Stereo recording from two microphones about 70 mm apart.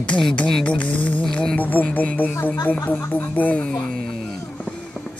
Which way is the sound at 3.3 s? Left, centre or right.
Left.